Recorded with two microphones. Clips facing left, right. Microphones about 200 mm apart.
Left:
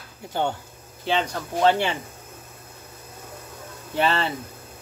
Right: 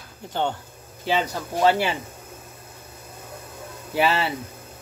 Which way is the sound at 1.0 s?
5° right (ahead or behind).